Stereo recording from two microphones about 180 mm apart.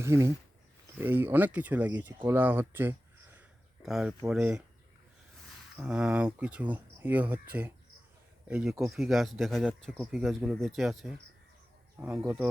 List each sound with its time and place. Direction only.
0.0 s speech: 15° right (ahead or behind)
5.7 s speech: 5° right (ahead or behind)
11.9 s speech: 15° right (ahead or behind)